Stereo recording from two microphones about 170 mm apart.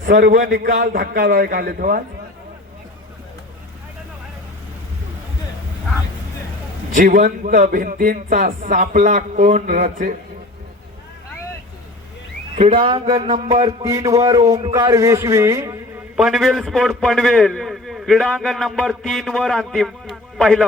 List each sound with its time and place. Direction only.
0.0 s a man's voice: 60° right (ahead or behind)
6.9 s speech: 55° right (ahead or behind)
12.5 s speech: 30° right (ahead or behind)
13.7 s a man's voice: 20° right (ahead or behind)
16.1 s a man's voice: 5° right (ahead or behind)